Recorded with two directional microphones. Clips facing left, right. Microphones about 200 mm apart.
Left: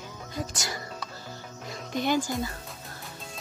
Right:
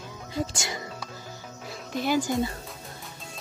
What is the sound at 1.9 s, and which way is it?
Speech, 5° right (ahead or behind).